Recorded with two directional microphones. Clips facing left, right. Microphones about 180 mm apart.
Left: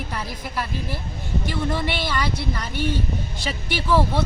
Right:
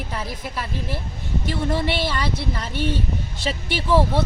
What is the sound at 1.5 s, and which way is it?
Speech, 30° right (ahead or behind).